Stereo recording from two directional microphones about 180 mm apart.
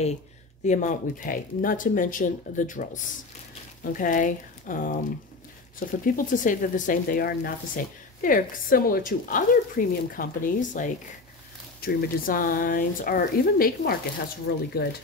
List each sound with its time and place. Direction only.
0.7 s speech: 45° left (ahead or behind)
14.5 s speech: 70° left (ahead or behind)